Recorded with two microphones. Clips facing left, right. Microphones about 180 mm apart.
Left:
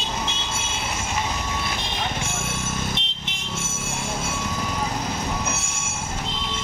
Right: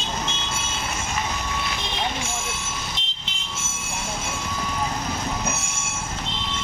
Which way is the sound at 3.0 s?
65° left (ahead or behind).